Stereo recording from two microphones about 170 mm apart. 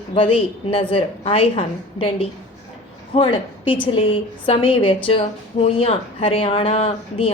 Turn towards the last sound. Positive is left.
turn(degrees=35)  # may be behind; listen again after turning